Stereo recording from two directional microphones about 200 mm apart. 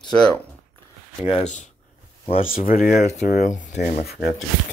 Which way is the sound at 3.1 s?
35° left (ahead or behind).